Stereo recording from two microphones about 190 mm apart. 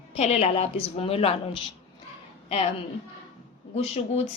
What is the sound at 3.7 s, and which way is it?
Speech, 35° left (ahead or behind).